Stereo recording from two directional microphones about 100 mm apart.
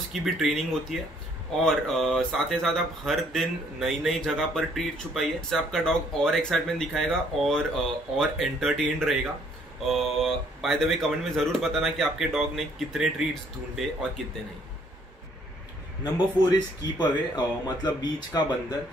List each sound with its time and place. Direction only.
0.1 s speech: centre (ahead or behind)
17.0 s speech: 45° left (ahead or behind)